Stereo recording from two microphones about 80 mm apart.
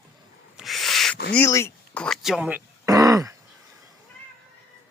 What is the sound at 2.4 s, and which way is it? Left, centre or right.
Speech, centre.